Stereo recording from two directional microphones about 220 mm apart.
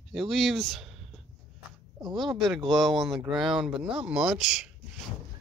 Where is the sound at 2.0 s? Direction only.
20° right (ahead or behind).